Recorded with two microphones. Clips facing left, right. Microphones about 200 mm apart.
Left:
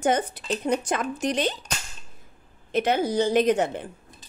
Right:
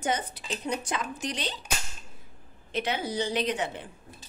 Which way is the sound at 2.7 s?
45° left (ahead or behind).